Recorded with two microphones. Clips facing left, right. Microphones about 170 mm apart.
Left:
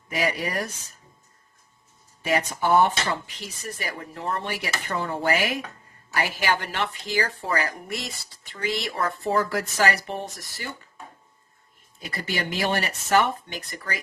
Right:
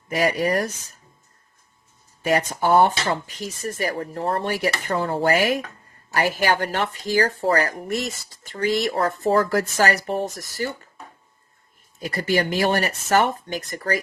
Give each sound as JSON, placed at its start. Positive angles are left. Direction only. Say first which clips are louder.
{"t": 0.1, "sound": "speech", "louder": "right 6 dB", "side_deg": -45}
{"t": 2.2, "sound": "speech", "louder": "right 3 dB", "side_deg": -45}
{"t": 11.9, "sound": "speech", "louder": "right 8 dB", "side_deg": -45}